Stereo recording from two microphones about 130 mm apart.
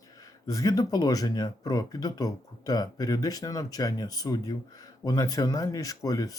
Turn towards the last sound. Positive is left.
turn(degrees=25)  # may be behind; listen again after turning